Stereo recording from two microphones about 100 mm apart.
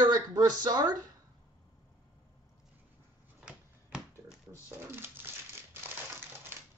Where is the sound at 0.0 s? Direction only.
40° right (ahead or behind).